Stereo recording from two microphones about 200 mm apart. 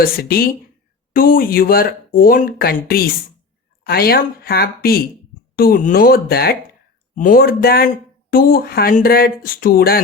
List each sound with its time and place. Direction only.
0.0 s speech: 50° left (ahead or behind)